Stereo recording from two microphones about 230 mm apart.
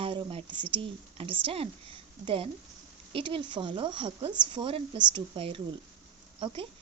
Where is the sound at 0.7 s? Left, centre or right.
Right.